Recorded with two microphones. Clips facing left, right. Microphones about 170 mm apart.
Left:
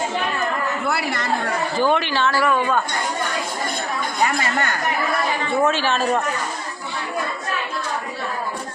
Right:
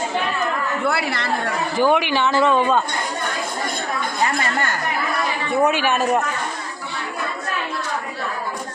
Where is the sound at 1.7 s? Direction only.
15° right (ahead or behind).